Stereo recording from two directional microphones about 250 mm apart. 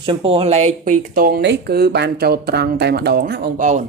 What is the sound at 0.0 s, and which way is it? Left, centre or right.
Speech, right.